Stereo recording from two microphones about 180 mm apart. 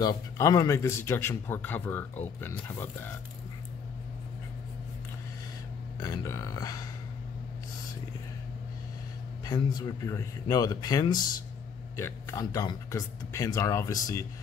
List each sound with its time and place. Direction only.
0.0 s speech: 20° left (ahead or behind)
5.9 s speech: 20° left (ahead or behind)
9.4 s speech: 20° left (ahead or behind)